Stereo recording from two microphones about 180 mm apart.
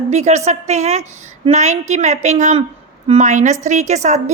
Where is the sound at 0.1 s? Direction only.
40° right (ahead or behind).